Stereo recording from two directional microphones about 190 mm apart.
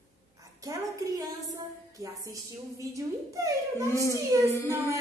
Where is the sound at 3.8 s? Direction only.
15° left (ahead or behind).